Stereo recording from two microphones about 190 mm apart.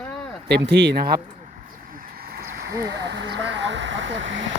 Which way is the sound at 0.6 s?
65° right (ahead or behind).